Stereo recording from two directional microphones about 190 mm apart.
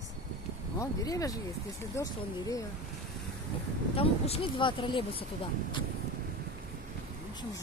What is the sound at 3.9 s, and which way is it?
Speech, 30° left (ahead or behind).